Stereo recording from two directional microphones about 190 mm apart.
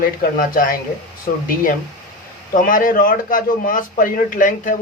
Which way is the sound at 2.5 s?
45° left (ahead or behind).